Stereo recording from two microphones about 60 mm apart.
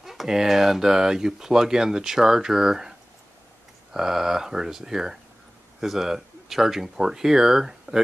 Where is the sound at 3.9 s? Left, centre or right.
Centre.